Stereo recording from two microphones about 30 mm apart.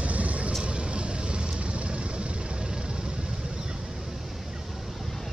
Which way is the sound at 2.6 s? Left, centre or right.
Right.